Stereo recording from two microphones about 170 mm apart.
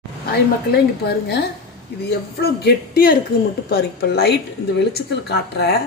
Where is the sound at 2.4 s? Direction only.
65° left (ahead or behind).